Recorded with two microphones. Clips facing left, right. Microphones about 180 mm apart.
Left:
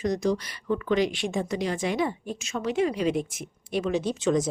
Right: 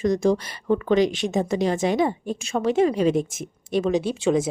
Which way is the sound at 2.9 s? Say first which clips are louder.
Right 5 dB; 45° right (ahead or behind).